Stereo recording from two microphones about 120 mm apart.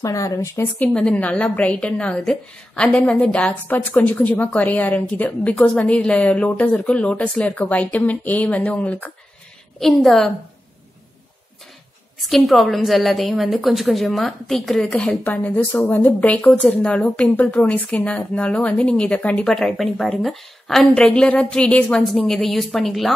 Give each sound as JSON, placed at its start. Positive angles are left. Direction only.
{"t": 0.0, "sound": "speech", "side_deg": 30}
{"t": 0.6, "sound": "a woman's voice", "side_deg": 10}
{"t": 12.2, "sound": "a woman's voice", "side_deg": 0}
{"t": 15.2, "sound": "a woman's voice", "side_deg": 15}